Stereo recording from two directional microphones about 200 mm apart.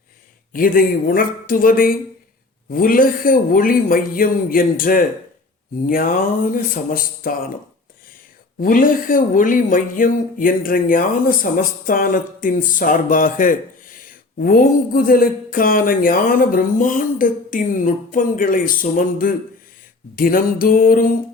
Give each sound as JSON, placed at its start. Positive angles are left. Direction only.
{"t": 0.5, "sound": "speech", "side_deg": 45}